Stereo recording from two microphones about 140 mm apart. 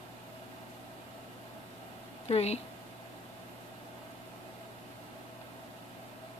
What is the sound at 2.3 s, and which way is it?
Speech, 50° left (ahead or behind).